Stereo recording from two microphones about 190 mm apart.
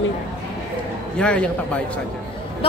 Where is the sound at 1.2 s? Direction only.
5° left (ahead or behind).